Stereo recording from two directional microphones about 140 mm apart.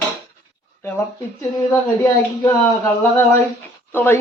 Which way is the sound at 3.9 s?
15° left (ahead or behind).